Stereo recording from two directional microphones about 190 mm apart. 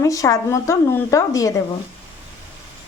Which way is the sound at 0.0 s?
15° left (ahead or behind).